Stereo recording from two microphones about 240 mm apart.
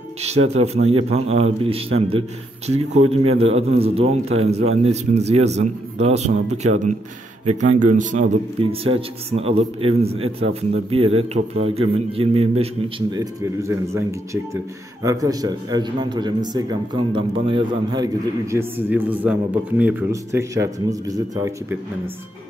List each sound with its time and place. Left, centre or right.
0.5 s a man's voice: right